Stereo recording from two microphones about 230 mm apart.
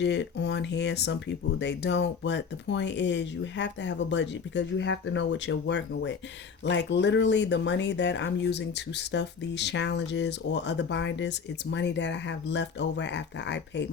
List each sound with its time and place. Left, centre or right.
0.0 s speech: left